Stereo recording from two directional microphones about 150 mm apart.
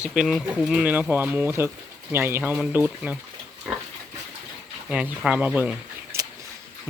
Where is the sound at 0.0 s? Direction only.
Centre (ahead or behind).